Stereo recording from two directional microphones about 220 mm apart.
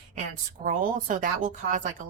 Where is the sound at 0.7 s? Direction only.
35° right (ahead or behind).